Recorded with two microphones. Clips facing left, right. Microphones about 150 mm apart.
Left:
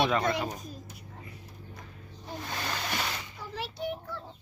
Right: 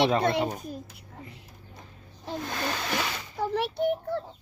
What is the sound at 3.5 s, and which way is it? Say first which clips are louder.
Child singing: right 8 dB; 60° right (ahead or behind).